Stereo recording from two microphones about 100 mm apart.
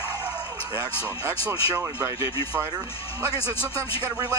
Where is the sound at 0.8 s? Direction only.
30° right (ahead or behind).